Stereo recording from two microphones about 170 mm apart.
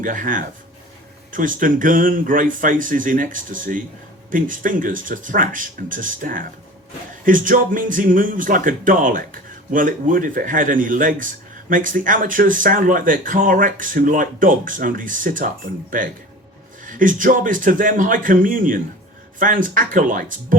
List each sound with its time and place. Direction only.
0.0 s speech: 50° right (ahead or behind)